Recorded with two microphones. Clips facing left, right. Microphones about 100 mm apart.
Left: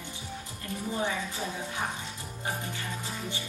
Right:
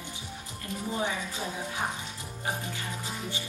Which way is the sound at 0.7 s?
20° right (ahead or behind).